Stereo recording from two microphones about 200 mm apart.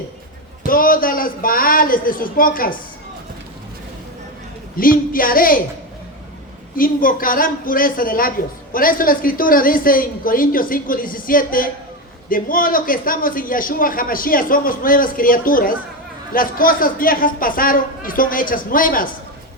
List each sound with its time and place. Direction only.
0.7 s a man's voice: 45° left (ahead or behind)
4.8 s a man's voice: 45° left (ahead or behind)
6.7 s a man's voice: 45° left (ahead or behind)